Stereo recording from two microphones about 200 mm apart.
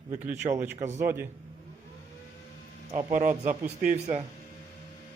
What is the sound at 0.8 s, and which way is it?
Speech, 35° right (ahead or behind).